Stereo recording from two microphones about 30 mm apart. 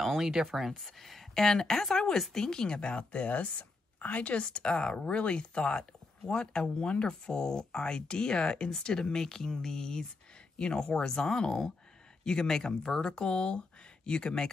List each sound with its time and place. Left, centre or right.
0.2 s speech: centre
0.7 s speech: centre
1.4 s speech: centre; by 4.4 s left
4.4 s speech: left